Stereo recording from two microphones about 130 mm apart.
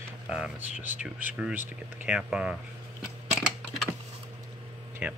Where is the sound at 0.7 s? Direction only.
75° left (ahead or behind).